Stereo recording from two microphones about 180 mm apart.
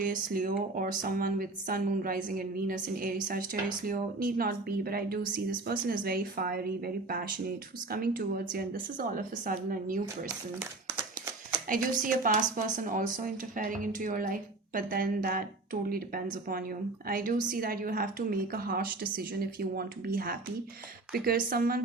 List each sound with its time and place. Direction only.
0.0 s a woman's voice: 50° right (ahead or behind)
11.7 s a woman's voice: 50° right (ahead or behind)